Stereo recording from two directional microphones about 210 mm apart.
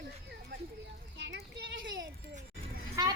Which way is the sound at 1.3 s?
55° right (ahead or behind).